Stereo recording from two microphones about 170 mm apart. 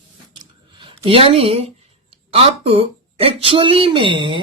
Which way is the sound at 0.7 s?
30° right (ahead or behind).